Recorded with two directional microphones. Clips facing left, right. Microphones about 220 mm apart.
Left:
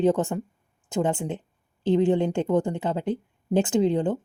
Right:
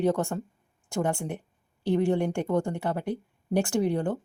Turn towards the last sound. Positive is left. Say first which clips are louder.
# left 4 dB
turn(degrees=20)  # may be behind; listen again after turning